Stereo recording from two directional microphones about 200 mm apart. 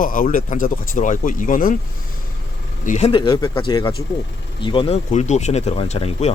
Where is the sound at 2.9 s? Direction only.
30° left (ahead or behind).